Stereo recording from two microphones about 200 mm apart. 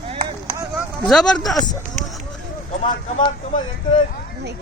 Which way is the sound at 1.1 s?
5° left (ahead or behind).